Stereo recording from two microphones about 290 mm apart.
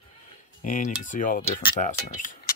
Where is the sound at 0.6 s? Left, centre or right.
Left.